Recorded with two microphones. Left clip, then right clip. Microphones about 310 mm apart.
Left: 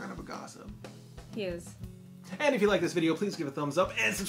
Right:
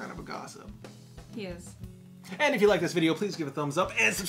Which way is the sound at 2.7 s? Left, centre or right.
Right.